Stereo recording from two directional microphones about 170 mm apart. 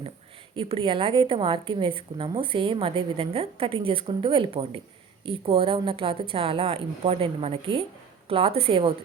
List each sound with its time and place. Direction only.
0.5 s a woman's voice: 35° right (ahead or behind)